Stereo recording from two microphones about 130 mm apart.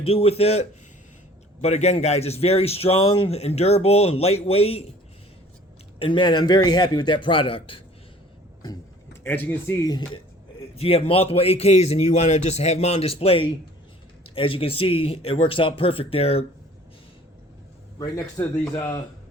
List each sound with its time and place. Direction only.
0.0 s a man's voice: 50° left (ahead or behind)
6.0 s a man's voice: 40° left (ahead or behind)
9.2 s speech: 15° left (ahead or behind)
10.8 s a man's voice: 50° left (ahead or behind)
18.3 s a man's voice: 25° left (ahead or behind)